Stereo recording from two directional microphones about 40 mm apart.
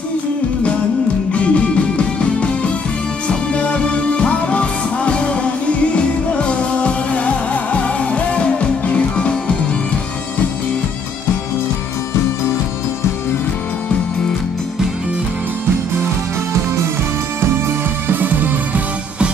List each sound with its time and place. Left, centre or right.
1.3 s music: left
18.0 s music: right